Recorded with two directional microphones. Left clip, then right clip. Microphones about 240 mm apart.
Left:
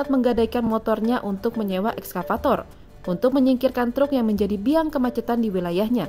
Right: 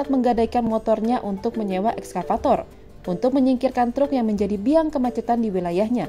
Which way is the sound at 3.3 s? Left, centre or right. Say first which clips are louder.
Right 1 dB; left.